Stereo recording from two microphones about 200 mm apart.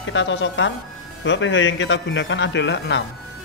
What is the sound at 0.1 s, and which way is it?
A woman's voice, 65° left (ahead or behind).